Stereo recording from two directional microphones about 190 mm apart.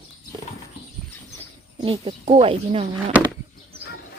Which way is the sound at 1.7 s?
30° right (ahead or behind).